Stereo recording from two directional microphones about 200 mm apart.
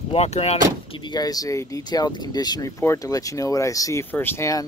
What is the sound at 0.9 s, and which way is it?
Speech, 20° left (ahead or behind).